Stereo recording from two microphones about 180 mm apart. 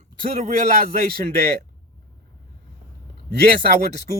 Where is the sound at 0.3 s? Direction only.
40° right (ahead or behind).